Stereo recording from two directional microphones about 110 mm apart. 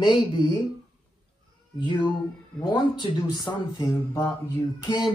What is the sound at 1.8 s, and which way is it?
Speech, 45° left (ahead or behind).